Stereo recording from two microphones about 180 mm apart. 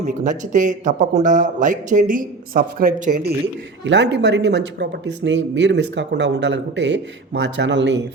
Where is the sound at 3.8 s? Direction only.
85° right.